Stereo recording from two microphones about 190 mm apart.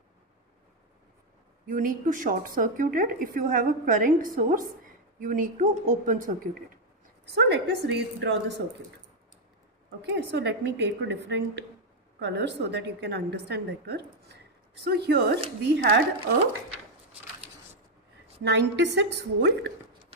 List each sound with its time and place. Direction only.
1.6 s a woman's voice: 45° right (ahead or behind)
7.3 s a woman's voice: 65° right (ahead or behind)
10.0 s a woman's voice: 60° right (ahead or behind)
18.4 s a woman's voice: 65° right (ahead or behind)